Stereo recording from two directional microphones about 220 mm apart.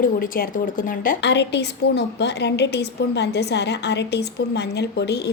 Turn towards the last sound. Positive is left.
turn(degrees=50)  # may be behind; listen again after turning